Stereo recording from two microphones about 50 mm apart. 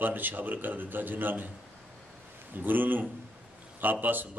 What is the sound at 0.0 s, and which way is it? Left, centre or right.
A man's voice, right.